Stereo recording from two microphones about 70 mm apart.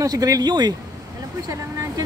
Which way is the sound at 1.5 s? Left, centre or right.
Right.